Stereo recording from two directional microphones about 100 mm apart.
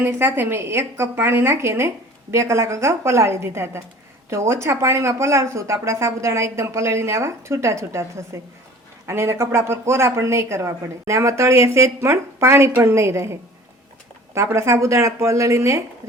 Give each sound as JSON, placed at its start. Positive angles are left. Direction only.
{"t": 0.0, "sound": "a woman's voice", "side_deg": -25}
{"t": 14.5, "sound": "speech", "side_deg": -30}